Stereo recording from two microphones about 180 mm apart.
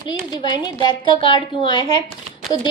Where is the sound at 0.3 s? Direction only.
25° left (ahead or behind).